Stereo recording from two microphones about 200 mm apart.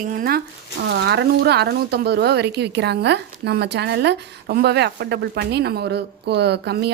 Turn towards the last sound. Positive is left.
turn(degrees=-55)  # may be behind; listen again after turning